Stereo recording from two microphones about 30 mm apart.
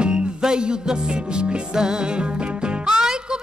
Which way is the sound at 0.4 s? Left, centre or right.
Right.